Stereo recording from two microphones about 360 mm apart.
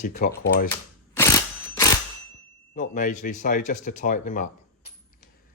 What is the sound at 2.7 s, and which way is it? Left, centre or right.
Speech, left.